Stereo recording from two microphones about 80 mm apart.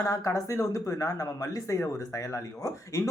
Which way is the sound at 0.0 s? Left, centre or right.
Left.